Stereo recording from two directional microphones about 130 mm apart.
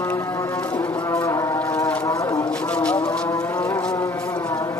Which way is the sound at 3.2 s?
25° left (ahead or behind).